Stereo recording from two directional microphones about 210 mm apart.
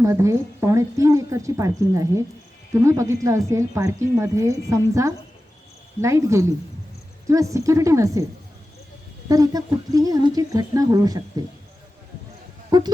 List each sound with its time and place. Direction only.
0.0 s speech: 15° right (ahead or behind)
9.3 s speech: 15° right (ahead or behind)